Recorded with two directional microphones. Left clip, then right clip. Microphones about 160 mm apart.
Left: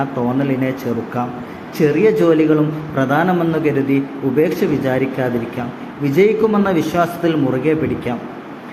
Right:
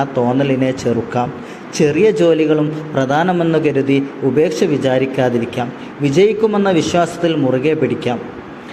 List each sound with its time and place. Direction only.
0.0 s a man's voice: 30° right (ahead or behind)
1.8 s a man's voice: 30° right (ahead or behind)